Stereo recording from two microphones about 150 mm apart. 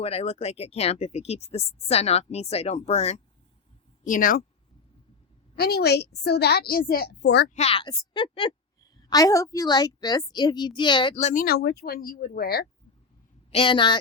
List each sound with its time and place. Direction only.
0.0 s speech: 40° left (ahead or behind)
4.0 s a woman's voice: 65° left (ahead or behind)
5.5 s a woman's voice: 90° left
7.5 s a woman's voice: 40° left (ahead or behind)
8.8 s a woman's voice: 25° left (ahead or behind)
11.1 s speech: 50° left (ahead or behind)
11.4 s a woman's voice: 90° left
13.5 s a woman's voice: 35° left (ahead or behind)